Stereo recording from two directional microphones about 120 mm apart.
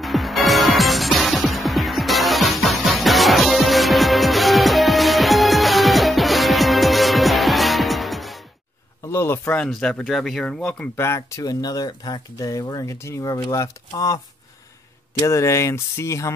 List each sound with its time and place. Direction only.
0.0 s music: centre (ahead or behind)
9.0 s speech: 20° left (ahead or behind)
9.6 s speech: 5° left (ahead or behind)
11.0 s speech: 25° left (ahead or behind)